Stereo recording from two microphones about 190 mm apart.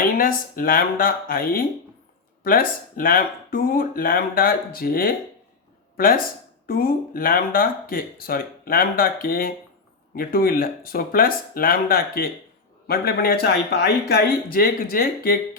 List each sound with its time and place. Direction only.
0.0 s speech: 50° left (ahead or behind)